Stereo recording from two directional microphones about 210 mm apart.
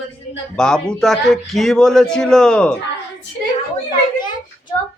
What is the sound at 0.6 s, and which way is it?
A man's voice, 5° left (ahead or behind).